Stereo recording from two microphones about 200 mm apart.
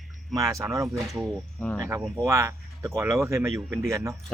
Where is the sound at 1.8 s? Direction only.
15° right (ahead or behind).